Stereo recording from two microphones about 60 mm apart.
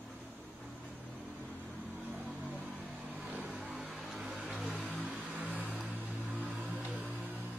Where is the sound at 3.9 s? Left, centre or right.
Centre.